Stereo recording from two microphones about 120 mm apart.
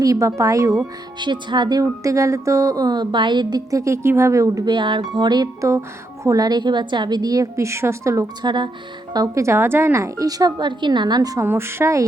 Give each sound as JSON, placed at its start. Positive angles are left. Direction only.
{"t": 0.0, "sound": "speech", "side_deg": -30}
{"t": 1.2, "sound": "speech", "side_deg": -40}
{"t": 4.6, "sound": "speech", "side_deg": -40}
{"t": 8.4, "sound": "speech", "side_deg": -40}
{"t": 11.4, "sound": "speech", "side_deg": -20}